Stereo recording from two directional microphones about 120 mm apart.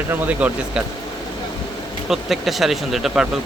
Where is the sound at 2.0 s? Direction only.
Centre (ahead or behind).